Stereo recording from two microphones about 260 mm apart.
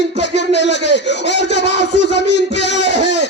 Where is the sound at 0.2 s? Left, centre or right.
Left.